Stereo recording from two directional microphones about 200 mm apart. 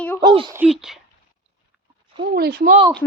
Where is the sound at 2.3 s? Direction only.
50° right (ahead or behind).